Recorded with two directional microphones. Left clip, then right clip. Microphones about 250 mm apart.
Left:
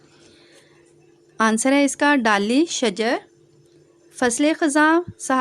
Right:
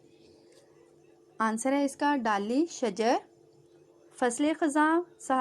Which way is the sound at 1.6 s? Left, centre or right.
Left.